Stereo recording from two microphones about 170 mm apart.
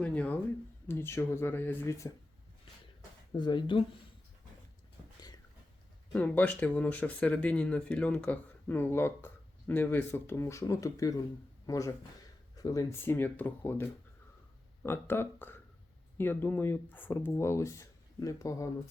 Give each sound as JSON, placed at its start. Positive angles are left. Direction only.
{"t": 0.0, "sound": "speech", "side_deg": 10}
{"t": 3.3, "sound": "speech", "side_deg": 25}
{"t": 6.1, "sound": "speech", "side_deg": 10}